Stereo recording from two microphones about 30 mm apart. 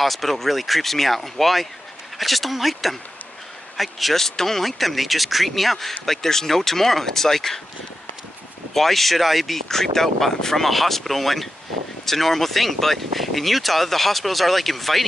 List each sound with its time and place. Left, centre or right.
0.0 s speech: centre
8.7 s speech: centre